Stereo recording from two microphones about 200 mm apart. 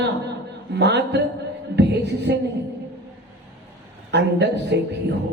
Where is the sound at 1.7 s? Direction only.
60° right (ahead or behind).